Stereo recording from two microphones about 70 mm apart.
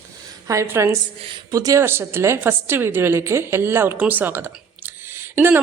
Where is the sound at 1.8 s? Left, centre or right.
Right.